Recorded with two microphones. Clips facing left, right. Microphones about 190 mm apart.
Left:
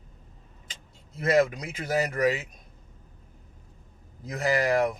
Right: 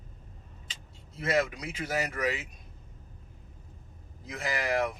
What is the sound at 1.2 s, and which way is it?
Speech, 40° left (ahead or behind).